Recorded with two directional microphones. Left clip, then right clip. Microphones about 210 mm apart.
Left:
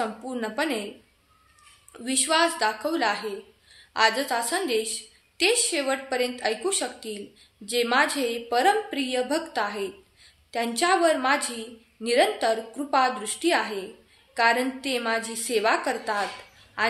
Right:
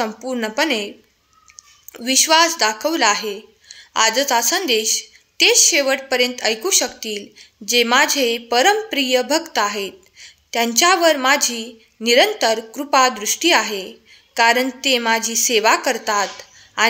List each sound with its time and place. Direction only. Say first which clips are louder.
0.0 s a woman's voice: right 7 dB; 35° right (ahead or behind)
1.9 s a woman's voice: right 10 dB; 35° right (ahead or behind)